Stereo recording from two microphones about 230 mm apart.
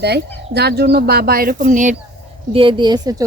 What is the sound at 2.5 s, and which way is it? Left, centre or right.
Speech, right.